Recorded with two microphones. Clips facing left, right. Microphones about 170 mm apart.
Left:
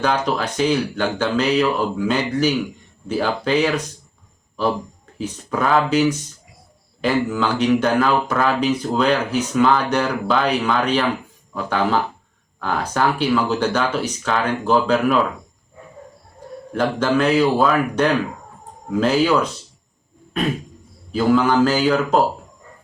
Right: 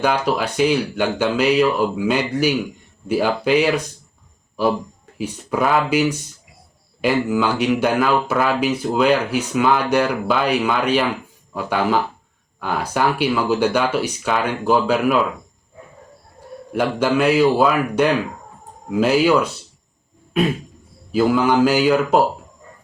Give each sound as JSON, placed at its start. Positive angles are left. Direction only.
{"t": 0.0, "sound": "speech", "side_deg": -10}
{"t": 5.1, "sound": "speech", "side_deg": -10}
{"t": 16.7, "sound": "speech", "side_deg": -10}